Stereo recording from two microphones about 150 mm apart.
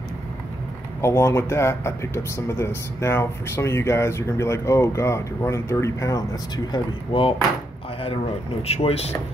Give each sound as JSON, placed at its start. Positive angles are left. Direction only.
{"t": 1.0, "sound": "speech", "side_deg": 20}
{"t": 8.6, "sound": "speech", "side_deg": 40}